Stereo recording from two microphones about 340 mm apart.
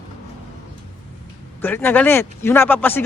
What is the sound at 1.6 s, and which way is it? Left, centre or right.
Speech, centre.